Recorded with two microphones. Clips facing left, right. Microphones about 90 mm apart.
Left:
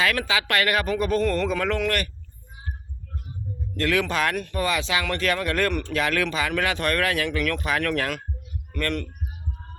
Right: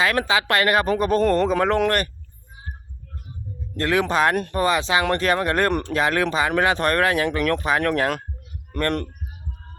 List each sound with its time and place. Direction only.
0.0 s speech: 30° right (ahead or behind)
3.8 s speech: 25° right (ahead or behind)
8.8 s speech: 40° right (ahead or behind)